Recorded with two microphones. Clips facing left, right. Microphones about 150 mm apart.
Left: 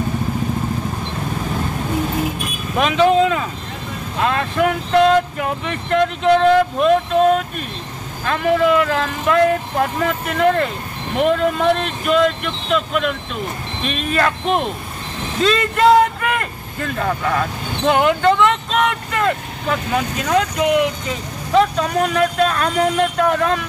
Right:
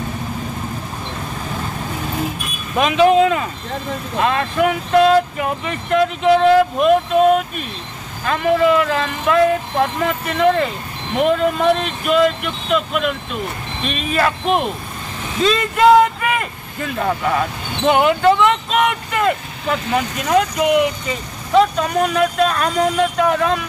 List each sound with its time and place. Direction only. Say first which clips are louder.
2.8 s speech: right 2 dB; 5° right (ahead or behind)